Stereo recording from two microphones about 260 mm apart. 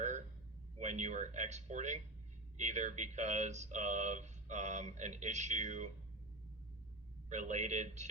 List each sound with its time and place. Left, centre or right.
0.8 s speech: right
7.3 s speech: right